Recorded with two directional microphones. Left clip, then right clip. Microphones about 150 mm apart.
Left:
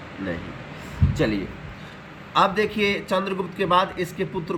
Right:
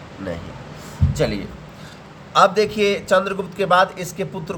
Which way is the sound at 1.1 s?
80° right.